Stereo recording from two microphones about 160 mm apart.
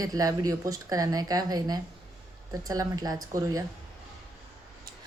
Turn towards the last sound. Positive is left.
turn(degrees=-20)  # may be behind; listen again after turning